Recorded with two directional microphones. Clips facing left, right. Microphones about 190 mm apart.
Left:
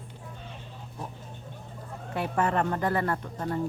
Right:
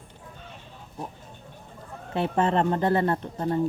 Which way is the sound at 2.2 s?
25° right (ahead or behind).